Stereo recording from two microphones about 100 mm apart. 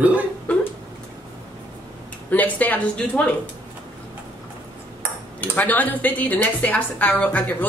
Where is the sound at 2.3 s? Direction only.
15° left (ahead or behind).